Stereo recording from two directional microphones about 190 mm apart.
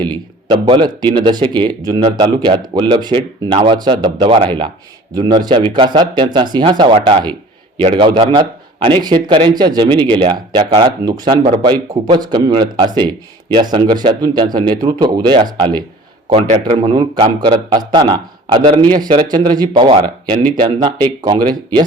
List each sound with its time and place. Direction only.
0.0 s a man's voice: 25° right (ahead or behind)